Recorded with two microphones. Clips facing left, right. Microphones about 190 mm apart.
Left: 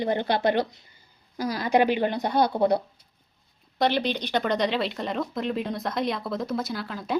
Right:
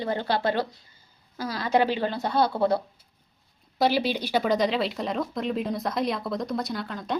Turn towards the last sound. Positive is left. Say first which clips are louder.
# even
turn(degrees=5)  # may be behind; listen again after turning